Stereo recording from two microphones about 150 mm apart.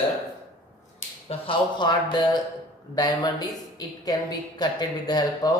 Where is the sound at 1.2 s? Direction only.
35° left (ahead or behind).